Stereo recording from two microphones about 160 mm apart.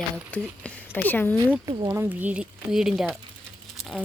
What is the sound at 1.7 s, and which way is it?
Speech, 20° right (ahead or behind).